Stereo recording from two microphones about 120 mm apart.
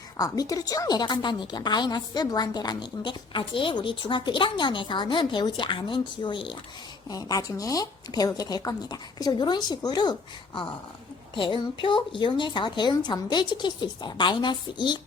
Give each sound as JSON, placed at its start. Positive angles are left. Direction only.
{"t": 0.2, "sound": "a woman's voice", "side_deg": 30}
{"t": 7.1, "sound": "a woman's voice", "side_deg": 30}